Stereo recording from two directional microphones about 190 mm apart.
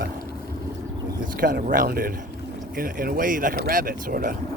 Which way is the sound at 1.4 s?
45° right (ahead or behind).